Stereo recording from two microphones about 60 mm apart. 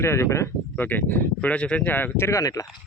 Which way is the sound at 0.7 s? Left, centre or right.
Left.